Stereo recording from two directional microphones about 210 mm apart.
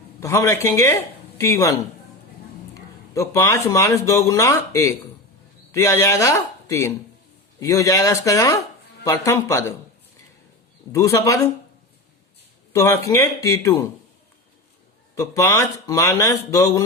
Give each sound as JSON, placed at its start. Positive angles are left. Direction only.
{"t": 0.2, "sound": "speech", "side_deg": 15}
{"t": 3.2, "sound": "speech", "side_deg": 15}
{"t": 10.9, "sound": "speech", "side_deg": 15}
{"t": 12.7, "sound": "speech", "side_deg": 15}
{"t": 15.1, "sound": "speech", "side_deg": 15}